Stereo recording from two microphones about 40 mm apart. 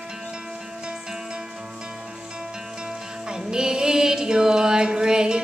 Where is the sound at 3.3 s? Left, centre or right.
Centre.